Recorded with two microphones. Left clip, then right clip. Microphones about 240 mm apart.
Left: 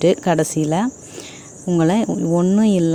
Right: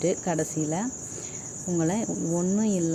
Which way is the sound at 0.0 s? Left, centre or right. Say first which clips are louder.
Left 11 dB; left.